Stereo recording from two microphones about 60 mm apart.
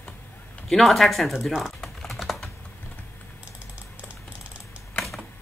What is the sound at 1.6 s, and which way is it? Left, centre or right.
Typing, centre.